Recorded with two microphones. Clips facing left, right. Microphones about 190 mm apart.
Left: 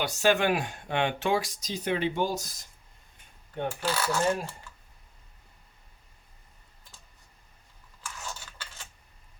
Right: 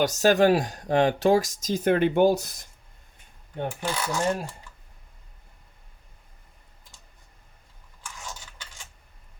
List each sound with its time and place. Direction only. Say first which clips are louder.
0.0 s speech: right 6 dB; 40° right (ahead or behind); by 2.5 s 60° right (ahead or behind)
3.7 s coin: left 1 dB; 15° right (ahead or behind)